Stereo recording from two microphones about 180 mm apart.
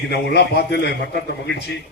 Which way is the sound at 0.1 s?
70° left (ahead or behind).